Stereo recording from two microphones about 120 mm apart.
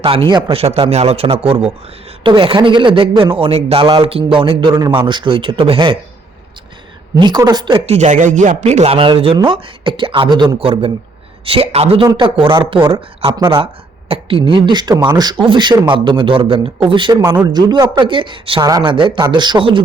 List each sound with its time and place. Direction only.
0.0 s speech: 45° right (ahead or behind)
0.5 s a man's voice: 55° right (ahead or behind)
7.2 s speech: 35° right (ahead or behind)
7.9 s speech: 75° right (ahead or behind); by 19.8 s 40° right (ahead or behind)